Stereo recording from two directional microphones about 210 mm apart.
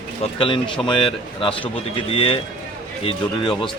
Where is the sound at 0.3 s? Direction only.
25° left (ahead or behind).